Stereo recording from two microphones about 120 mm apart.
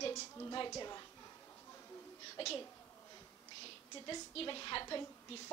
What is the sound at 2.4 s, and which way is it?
Speech, 55° left (ahead or behind).